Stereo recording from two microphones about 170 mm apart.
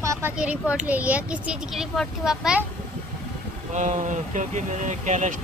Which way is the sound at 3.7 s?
45° right (ahead or behind).